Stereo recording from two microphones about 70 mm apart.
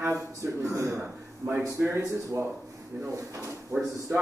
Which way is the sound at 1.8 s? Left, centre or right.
Right.